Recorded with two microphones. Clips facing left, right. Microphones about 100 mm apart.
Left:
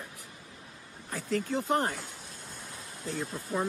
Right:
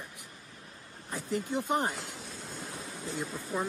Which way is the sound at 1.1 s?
15° right (ahead or behind).